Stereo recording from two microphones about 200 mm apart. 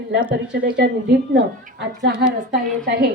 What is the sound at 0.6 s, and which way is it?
Speech, 60° right (ahead or behind).